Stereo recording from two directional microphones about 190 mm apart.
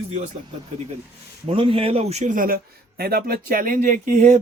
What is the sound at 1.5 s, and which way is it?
Speech, 30° right (ahead or behind).